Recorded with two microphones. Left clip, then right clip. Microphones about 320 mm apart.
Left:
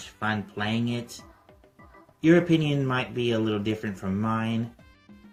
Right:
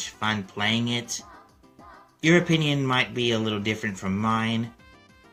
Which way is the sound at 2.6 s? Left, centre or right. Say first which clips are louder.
Right 4 dB; centre.